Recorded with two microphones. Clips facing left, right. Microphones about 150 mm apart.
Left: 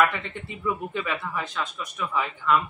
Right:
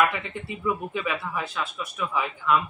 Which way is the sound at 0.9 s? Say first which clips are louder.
Right 1 dB; 5° right (ahead or behind).